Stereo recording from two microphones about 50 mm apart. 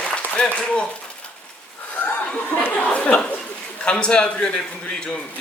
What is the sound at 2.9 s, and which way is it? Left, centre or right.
Speech, left.